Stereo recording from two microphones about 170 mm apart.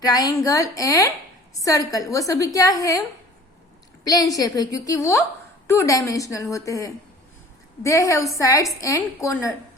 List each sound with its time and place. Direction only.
0.0 s a woman's voice: 20° left (ahead or behind)
4.0 s a woman's voice: 20° left (ahead or behind)